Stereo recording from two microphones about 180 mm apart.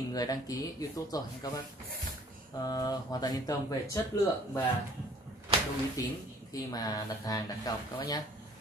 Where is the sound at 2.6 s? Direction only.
20° left (ahead or behind).